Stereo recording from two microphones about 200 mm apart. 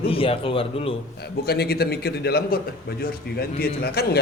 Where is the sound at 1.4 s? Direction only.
55° left (ahead or behind).